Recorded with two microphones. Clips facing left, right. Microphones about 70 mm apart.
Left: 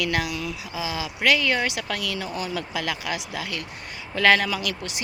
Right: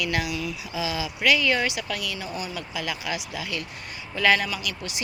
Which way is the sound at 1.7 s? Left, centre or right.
Left.